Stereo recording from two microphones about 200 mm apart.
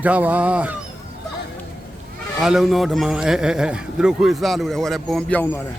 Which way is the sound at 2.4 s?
Centre (ahead or behind).